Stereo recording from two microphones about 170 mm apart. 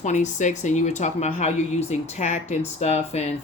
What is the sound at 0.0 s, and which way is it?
A woman's voice, 45° left (ahead or behind).